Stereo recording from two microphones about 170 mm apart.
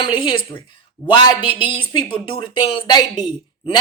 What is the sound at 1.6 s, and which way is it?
Speech, 30° left (ahead or behind).